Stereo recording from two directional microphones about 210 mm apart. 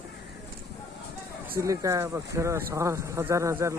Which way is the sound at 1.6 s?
15° right (ahead or behind).